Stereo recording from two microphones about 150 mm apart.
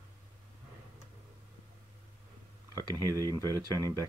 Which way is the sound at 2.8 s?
25° right (ahead or behind).